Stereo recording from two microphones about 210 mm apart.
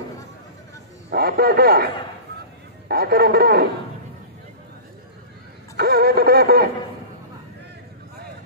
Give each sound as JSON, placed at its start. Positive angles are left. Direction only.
{"t": 1.1, "sound": "a man's voice", "side_deg": -45}
{"t": 2.9, "sound": "music", "side_deg": -45}
{"t": 5.8, "sound": "music", "side_deg": -50}